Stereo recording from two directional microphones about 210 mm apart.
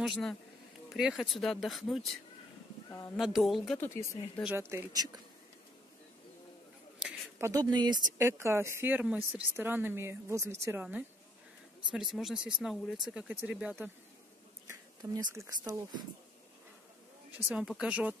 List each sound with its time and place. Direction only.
0.0 s speech: centre (ahead or behind)
3.2 s speech: centre (ahead or behind)
4.4 s a woman's voice: 10° right (ahead or behind)
7.0 s a sound: 10° right (ahead or behind)
8.2 s a woman's voice: 10° right (ahead or behind)
17.5 s speech: 5° right (ahead or behind)